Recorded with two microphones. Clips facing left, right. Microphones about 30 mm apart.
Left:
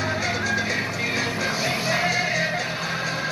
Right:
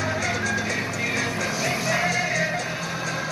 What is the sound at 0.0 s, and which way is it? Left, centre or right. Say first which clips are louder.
Music: even; centre.